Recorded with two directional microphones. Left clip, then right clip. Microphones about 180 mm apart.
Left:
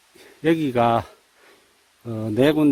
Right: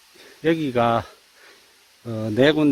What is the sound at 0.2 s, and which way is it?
Speech, 15° left (ahead or behind).